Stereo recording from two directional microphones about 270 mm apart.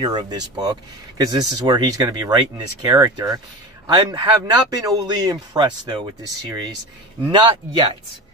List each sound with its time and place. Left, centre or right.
0.0 s speech: centre